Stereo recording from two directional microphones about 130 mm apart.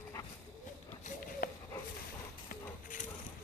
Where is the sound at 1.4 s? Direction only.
90° left.